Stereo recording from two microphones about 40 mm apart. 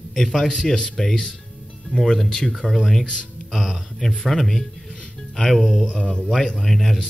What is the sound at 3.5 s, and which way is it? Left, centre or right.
Speech, centre.